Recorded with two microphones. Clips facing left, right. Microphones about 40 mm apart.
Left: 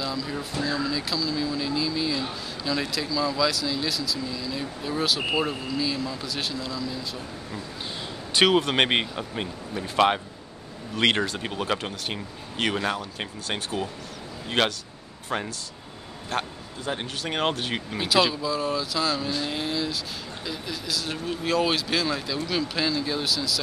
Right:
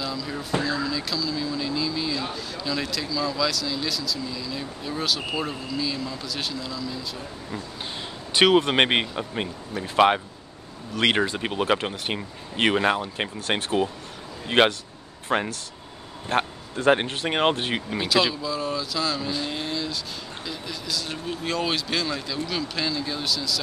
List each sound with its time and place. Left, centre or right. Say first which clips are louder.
0.0 s speech: even; centre
8.3 s speech: right 2 dB; centre
11.2 s speech: right 4 dB; centre
16.7 s speech: right 12 dB; right
17.0 s speech: right 4 dB; right
17.7 s speech: even; centre